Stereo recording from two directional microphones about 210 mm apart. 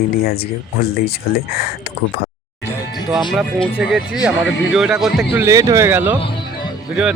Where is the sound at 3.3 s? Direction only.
Centre (ahead or behind).